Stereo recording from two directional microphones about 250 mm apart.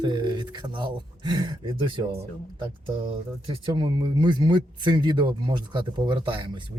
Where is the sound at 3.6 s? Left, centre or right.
Centre.